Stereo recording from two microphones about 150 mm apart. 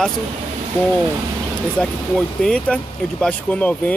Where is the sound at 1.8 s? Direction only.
5° left (ahead or behind).